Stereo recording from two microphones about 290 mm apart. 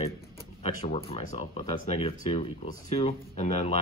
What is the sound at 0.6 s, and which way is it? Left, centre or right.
Speech, left.